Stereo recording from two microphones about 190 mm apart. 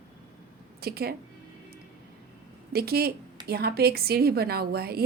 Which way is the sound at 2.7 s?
55° right (ahead or behind).